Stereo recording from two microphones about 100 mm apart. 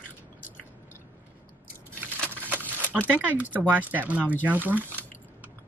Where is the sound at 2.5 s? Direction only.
15° right (ahead or behind).